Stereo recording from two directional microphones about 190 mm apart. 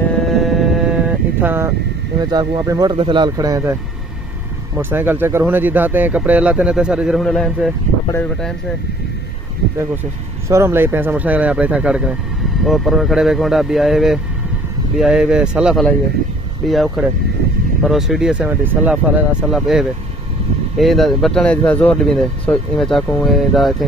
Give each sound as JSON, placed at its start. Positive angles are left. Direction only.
{"t": 0.3, "sound": "a sound", "side_deg": 0}
{"t": 2.3, "sound": "speech", "side_deg": -20}
{"t": 4.7, "sound": "speech", "side_deg": -10}
{"t": 10.5, "sound": "speech", "side_deg": -15}